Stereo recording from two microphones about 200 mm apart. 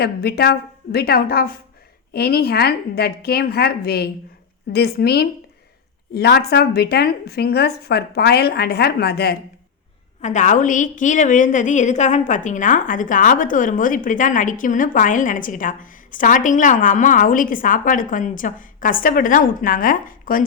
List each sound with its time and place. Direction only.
0.0 s speech: 50° left (ahead or behind)
10.2 s a woman's voice: 35° left (ahead or behind)